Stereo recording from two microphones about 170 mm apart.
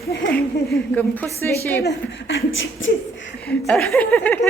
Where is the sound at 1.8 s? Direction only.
85° left.